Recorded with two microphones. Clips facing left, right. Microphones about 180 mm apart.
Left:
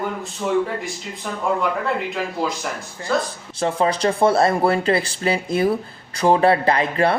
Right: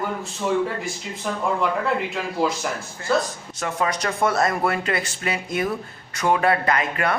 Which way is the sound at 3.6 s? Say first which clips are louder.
Left 5 dB; 30° left (ahead or behind).